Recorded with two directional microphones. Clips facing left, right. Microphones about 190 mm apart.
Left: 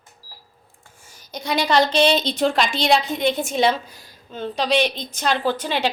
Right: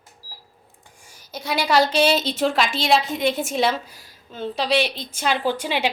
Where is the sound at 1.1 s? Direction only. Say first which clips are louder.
Left 2 dB; 10° right (ahead or behind).